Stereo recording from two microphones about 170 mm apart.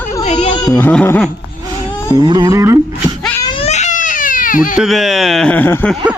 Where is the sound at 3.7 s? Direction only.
45° left (ahead or behind).